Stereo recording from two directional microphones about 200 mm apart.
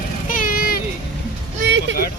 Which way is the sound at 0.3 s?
45° left (ahead or behind).